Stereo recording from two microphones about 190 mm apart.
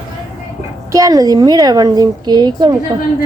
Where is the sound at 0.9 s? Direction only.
20° right (ahead or behind).